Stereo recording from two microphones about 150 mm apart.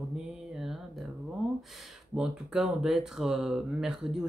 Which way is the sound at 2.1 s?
5° right (ahead or behind).